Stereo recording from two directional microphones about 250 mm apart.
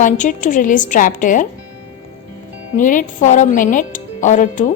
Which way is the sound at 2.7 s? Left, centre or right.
Left.